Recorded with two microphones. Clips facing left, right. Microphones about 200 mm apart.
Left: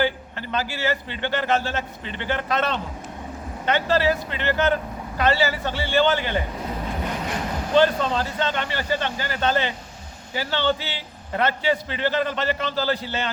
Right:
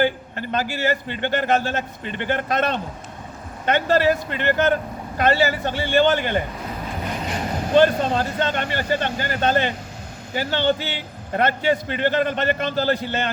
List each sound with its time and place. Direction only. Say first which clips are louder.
0.0 s a man's voice: right 3 dB; 50° right (ahead or behind)
7.8 s a man's voice: right 2 dB; 50° right (ahead or behind)